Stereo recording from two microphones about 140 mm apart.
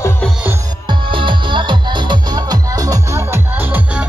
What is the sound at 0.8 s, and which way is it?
Music, 35° right (ahead or behind).